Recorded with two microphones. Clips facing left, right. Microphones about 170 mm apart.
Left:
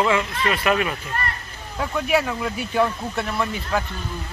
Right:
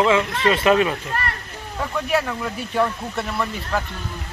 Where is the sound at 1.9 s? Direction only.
5° left (ahead or behind).